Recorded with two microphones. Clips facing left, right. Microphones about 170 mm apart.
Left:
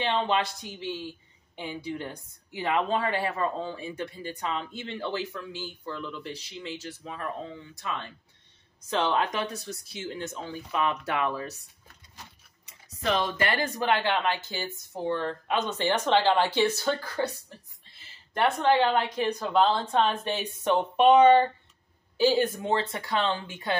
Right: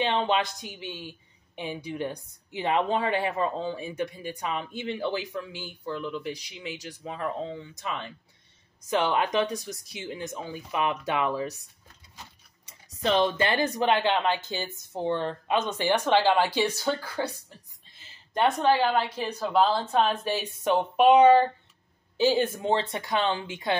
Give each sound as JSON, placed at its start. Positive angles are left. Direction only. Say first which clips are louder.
{"t": 0.0, "sound": "speech", "louder": "right 1 dB", "side_deg": -15}
{"t": 13.0, "sound": "speech", "louder": "right 3 dB", "side_deg": -25}
{"t": 18.4, "sound": "speech", "louder": "even", "side_deg": -15}